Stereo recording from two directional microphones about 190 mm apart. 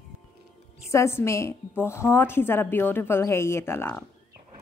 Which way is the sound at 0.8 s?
15° left (ahead or behind).